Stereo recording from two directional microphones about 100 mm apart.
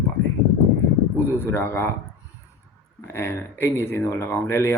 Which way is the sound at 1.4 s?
25° left (ahead or behind).